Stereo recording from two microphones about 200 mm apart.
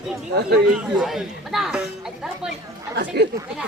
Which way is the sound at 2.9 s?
55° right (ahead or behind).